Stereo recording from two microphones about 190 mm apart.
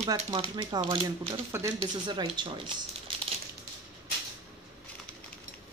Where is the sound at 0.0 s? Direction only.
25° right (ahead or behind).